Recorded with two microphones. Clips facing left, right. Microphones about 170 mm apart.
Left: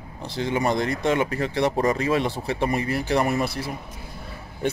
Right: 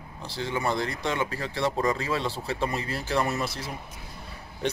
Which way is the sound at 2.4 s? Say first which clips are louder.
Left 5 dB; 65° left (ahead or behind).